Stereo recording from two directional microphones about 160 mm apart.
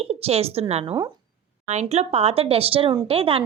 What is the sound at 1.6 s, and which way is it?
A woman's voice, 45° right (ahead or behind).